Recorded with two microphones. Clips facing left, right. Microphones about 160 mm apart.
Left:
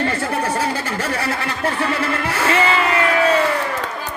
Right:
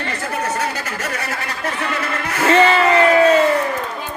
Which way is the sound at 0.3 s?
30° left (ahead or behind).